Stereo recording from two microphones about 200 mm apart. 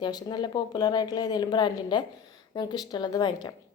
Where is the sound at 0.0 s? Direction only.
20° left (ahead or behind).